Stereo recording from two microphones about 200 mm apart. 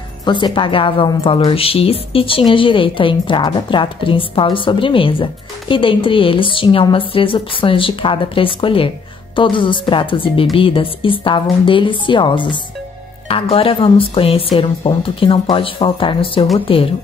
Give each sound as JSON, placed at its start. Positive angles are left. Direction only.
{"t": 0.2, "sound": "a woman's voice", "side_deg": 25}